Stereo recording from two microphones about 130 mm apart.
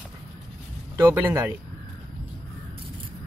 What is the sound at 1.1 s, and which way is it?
Speech, 15° right (ahead or behind).